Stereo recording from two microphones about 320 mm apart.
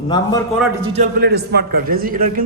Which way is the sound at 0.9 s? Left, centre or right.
Right.